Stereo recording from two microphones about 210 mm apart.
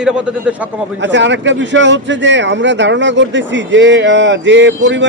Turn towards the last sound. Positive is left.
turn(degrees=-60)  # may be behind; listen again after turning